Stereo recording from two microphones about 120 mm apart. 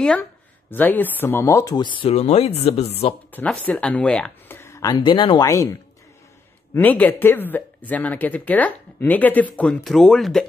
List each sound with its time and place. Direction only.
0.0 s speech: 10° left (ahead or behind); by 1.8 s 25° left (ahead or behind)
1.8 s speech: 45° left (ahead or behind)
2.1 s speech: 60° left (ahead or behind)
3.3 s speech: 15° left (ahead or behind)
4.6 s a sound: 25° left (ahead or behind)
4.9 s speech: 45° left (ahead or behind)
5.4 s speech: 25° left (ahead or behind)
6.7 s speech: 15° left (ahead or behind)